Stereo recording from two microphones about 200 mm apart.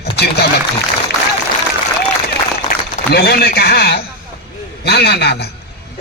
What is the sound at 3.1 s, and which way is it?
A man's voice, 50° left (ahead or behind).